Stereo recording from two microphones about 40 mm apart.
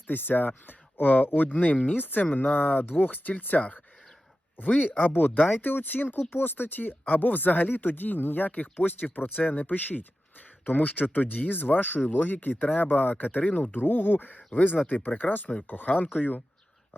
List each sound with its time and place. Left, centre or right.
0.1 s speech: left
8.8 s speech: left
13.7 s speech: left